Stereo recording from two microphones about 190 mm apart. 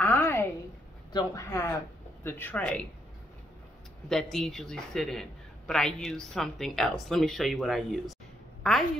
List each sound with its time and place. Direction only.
0.0 s a sound: 10° left (ahead or behind)
1.1 s speech: 15° left (ahead or behind)
4.1 s a woman's voice: centre (ahead or behind)